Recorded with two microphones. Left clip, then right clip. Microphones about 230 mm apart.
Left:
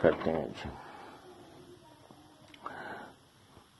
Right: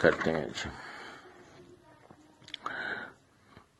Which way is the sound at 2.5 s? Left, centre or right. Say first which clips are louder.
Right 7 dB; right.